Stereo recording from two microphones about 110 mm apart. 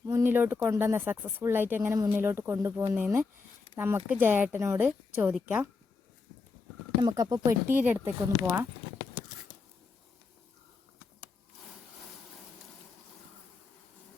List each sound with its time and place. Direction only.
0.1 s a woman's voice: 20° right (ahead or behind)
7.0 s speech: 35° right (ahead or behind)
7.7 s speech: 15° right (ahead or behind)